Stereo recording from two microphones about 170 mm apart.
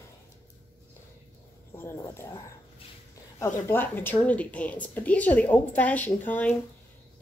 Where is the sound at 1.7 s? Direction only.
15° left (ahead or behind).